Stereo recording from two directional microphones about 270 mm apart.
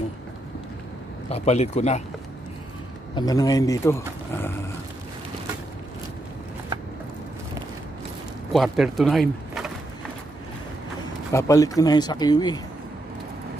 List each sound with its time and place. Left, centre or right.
1.3 s speech: left
3.2 s speech: centre
8.5 s speech: centre
11.3 s speech: centre